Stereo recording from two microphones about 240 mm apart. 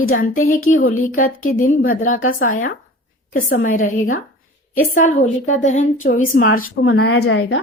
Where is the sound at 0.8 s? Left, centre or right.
Left.